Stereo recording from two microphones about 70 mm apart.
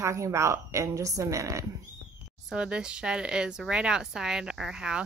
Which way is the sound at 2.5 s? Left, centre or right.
Centre.